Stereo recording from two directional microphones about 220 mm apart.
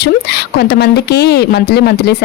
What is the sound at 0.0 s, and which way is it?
Speech, 50° left (ahead or behind).